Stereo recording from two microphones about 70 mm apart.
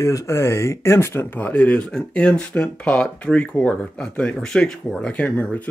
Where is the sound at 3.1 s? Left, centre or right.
Centre.